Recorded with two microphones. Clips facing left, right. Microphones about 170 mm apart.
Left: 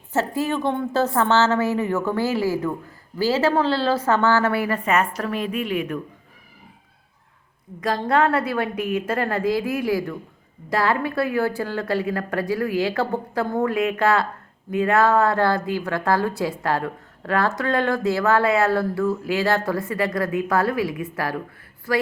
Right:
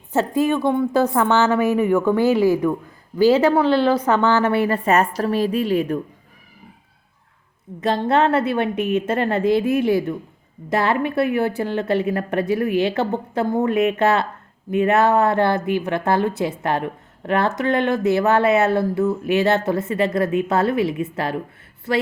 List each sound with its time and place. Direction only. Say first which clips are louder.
0.1 s a woman's voice: right 4 dB; 15° right (ahead or behind); by 6.0 s 35° right (ahead or behind)
7.8 s speech: right 2 dB; 25° right (ahead or behind)